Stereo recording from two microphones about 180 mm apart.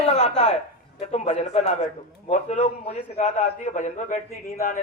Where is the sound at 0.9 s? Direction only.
35° left (ahead or behind).